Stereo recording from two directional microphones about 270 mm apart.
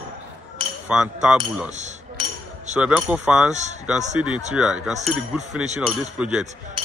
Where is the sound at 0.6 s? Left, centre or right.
Centre.